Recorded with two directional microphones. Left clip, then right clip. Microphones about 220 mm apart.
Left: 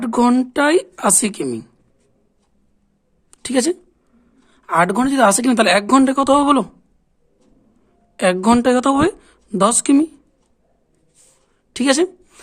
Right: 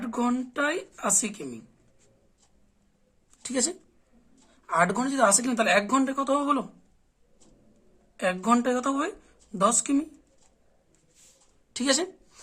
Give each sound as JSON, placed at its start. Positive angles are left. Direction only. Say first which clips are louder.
{"t": 0.0, "sound": "a woman's voice", "louder": "left 13 dB", "side_deg": 45}
{"t": 3.4, "sound": "a woman's voice", "louder": "left 11 dB", "side_deg": 40}
{"t": 8.1, "sound": "speech", "louder": "left 9 dB", "side_deg": 45}
{"t": 11.7, "sound": "a sound", "louder": "left 10 dB", "side_deg": 35}